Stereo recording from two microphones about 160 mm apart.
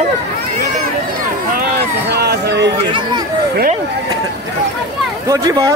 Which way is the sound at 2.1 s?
90° right.